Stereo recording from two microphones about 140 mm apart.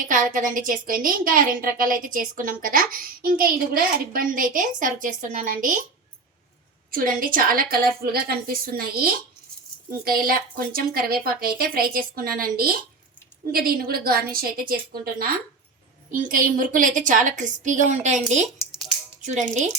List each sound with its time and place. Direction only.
0.0 s a child's voice: 70° right (ahead or behind)
6.9 s a woman's voice: 90° right
16.3 s a woman's voice: 75° right (ahead or behind); by 18.2 s 60° right (ahead or behind)
19.2 s a woman's voice: 55° right (ahead or behind)